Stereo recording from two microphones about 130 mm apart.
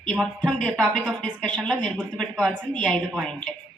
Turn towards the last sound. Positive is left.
turn(degrees=5)  # may be behind; listen again after turning